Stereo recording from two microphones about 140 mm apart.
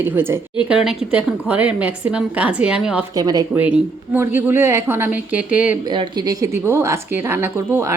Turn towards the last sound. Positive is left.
turn(degrees=-15)  # may be behind; listen again after turning